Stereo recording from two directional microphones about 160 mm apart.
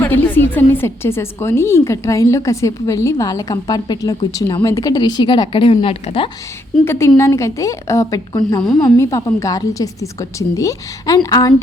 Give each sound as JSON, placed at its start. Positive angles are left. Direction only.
{"t": 0.0, "sound": "a woman's voice", "side_deg": 15}
{"t": 6.8, "sound": "a woman's voice", "side_deg": 15}